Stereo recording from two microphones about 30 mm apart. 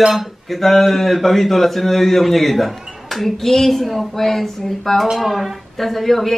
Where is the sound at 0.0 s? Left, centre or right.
Centre.